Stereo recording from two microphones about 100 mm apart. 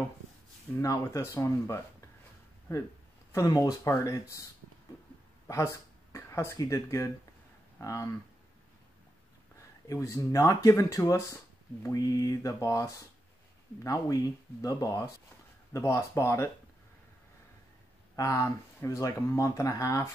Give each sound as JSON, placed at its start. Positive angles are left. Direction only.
{"t": 0.7, "sound": "speech", "side_deg": 35}
{"t": 3.3, "sound": "speech", "side_deg": 40}
{"t": 5.5, "sound": "speech", "side_deg": 35}
{"t": 9.8, "sound": "speech", "side_deg": 30}
{"t": 18.1, "sound": "speech", "side_deg": 35}